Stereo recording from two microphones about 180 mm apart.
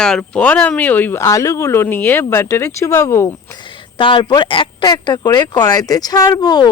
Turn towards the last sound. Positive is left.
turn(degrees=20)  # may be behind; listen again after turning